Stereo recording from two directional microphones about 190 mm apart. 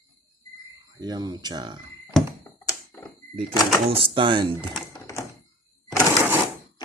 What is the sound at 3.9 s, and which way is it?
Speech, 30° right (ahead or behind).